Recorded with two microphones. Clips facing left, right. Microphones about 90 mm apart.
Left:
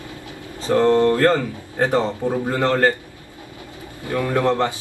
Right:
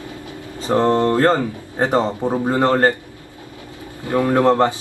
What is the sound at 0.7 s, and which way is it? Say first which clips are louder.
Speech: left 1 dB; 20° right (ahead or behind).